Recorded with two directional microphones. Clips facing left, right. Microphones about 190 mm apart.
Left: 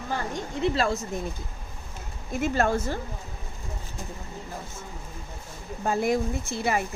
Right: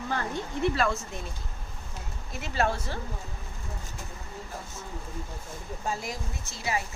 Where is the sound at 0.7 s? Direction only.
30° left (ahead or behind).